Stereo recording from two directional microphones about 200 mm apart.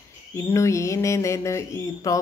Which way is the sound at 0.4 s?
15° left (ahead or behind).